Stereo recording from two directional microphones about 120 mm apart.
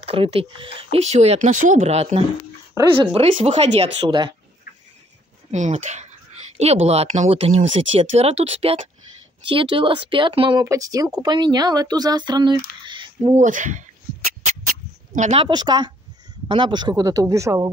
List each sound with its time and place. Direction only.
0.0 s speech: 55° right (ahead or behind)
1.0 s speech: 65° right (ahead or behind)
2.9 s speech: 50° right (ahead or behind)
5.5 s speech: 85° right
6.6 s speech: 60° right (ahead or behind); by 10.6 s 45° right (ahead or behind)
10.6 s speech: 30° right (ahead or behind); by 13.4 s 45° right (ahead or behind)
13.4 s speech: 90° right
15.3 s speech: 40° right (ahead or behind); by 17.6 s 25° right (ahead or behind)